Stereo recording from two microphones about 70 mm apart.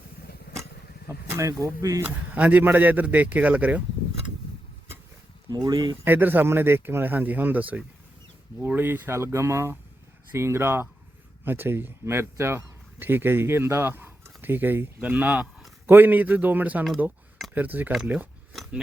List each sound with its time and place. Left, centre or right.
1.0 s speech: right
2.3 s speech: right
5.5 s speech: right
6.1 s speech: right
9.1 s speech: right